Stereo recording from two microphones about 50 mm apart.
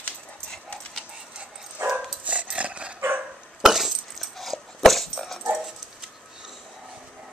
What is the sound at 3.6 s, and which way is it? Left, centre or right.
Dog, centre.